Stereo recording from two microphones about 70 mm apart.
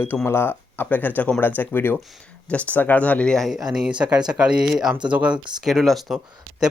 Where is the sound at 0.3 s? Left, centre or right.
Left.